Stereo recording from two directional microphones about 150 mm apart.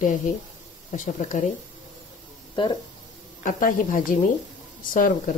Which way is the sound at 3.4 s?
60° left (ahead or behind).